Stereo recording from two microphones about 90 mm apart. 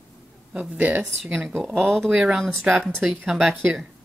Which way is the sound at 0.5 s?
15° right (ahead or behind).